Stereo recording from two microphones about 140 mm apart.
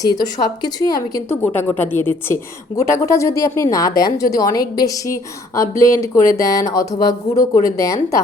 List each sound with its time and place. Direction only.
0.3 s a woman's voice: 30° left (ahead or behind)
1.4 s a woman's voice: 15° left (ahead or behind)